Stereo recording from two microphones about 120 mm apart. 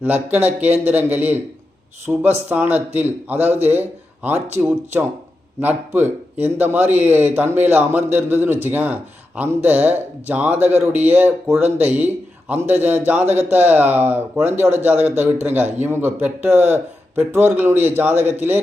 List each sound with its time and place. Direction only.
0.0 s a man's voice: 15° right (ahead or behind)